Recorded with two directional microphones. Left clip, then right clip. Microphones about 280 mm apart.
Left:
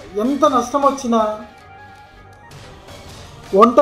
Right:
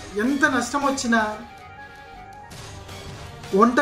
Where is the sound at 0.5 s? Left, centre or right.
Right.